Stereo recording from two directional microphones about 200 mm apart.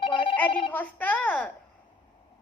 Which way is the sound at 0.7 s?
10° left (ahead or behind).